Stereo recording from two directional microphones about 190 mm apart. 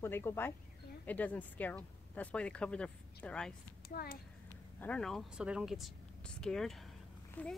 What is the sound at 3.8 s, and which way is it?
Speech, 55° left (ahead or behind).